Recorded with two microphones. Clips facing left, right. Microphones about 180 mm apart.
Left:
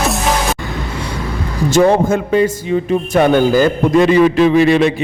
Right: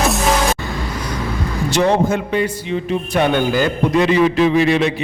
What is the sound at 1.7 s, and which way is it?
A man's voice, 50° left (ahead or behind).